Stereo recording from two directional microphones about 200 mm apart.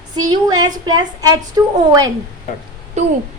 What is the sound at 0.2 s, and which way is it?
Child singing, 20° right (ahead or behind).